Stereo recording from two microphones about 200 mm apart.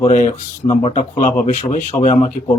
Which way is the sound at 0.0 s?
35° left (ahead or behind).